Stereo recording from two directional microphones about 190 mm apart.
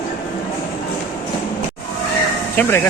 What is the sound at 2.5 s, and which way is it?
Speech, 10° left (ahead or behind).